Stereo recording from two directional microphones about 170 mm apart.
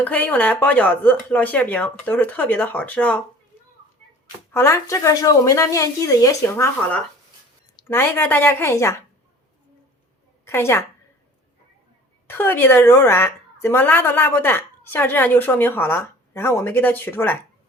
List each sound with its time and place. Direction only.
0.0 s a woman's voice: 10° left (ahead or behind)
4.5 s a woman's voice: 15° left (ahead or behind)
10.4 s a woman's voice: 15° left (ahead or behind)
12.3 s a woman's voice: 10° left (ahead or behind)